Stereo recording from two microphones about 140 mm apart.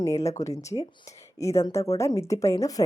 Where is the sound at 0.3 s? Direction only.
25° left (ahead or behind).